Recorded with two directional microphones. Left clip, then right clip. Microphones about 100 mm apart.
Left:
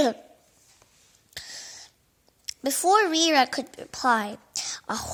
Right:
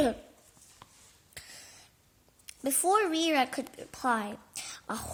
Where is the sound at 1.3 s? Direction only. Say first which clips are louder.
Left 9 dB; 30° left (ahead or behind).